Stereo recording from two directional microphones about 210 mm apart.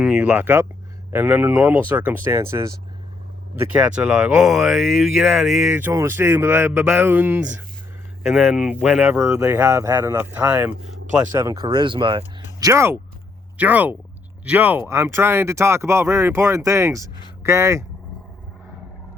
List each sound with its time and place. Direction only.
0.0 s speech: 5° right (ahead or behind)
3.9 s speech: 5° right (ahead or behind)